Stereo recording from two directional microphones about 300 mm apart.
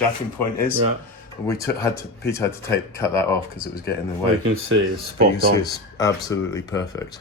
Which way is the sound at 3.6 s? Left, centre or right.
Left.